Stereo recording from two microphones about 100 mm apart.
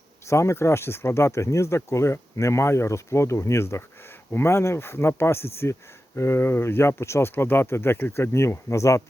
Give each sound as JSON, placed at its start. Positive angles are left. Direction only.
{"t": 0.3, "sound": "speech", "side_deg": 30}